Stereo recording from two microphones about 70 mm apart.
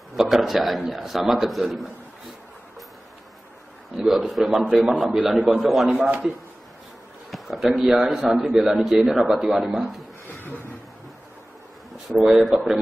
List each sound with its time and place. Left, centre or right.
0.1 s a man's voice: centre
3.9 s a man's voice: centre
7.2 s a man's voice: centre
10.2 s a sound: left
12.1 s a man's voice: centre